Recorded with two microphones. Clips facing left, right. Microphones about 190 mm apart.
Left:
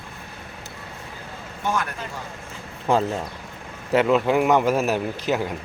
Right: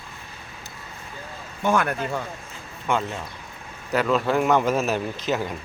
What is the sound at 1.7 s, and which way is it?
Speech, 55° right (ahead or behind).